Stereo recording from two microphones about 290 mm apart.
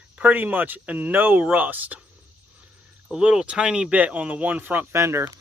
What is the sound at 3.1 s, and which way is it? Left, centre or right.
Speech, centre.